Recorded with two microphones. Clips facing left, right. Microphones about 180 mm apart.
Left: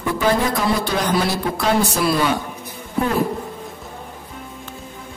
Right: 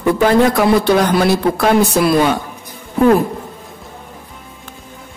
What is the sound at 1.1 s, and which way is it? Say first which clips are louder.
Speech: right 7 dB; 60° right (ahead or behind).